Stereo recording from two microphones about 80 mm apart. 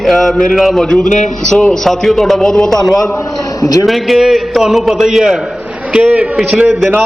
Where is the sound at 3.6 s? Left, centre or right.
Left.